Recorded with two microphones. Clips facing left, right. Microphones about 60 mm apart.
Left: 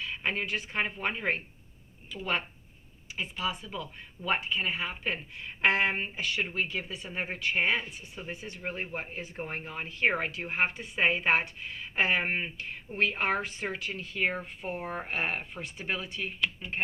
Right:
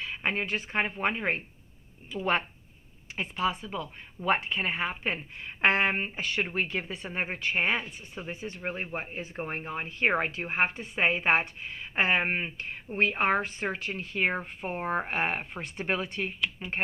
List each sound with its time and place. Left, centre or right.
0.0 s speech: right